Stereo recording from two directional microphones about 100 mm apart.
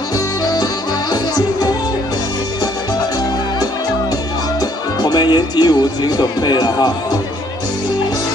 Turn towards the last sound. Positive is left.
turn(degrees=45)  # may be behind; listen again after turning